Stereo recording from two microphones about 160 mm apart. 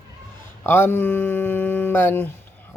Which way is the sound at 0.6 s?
15° left (ahead or behind).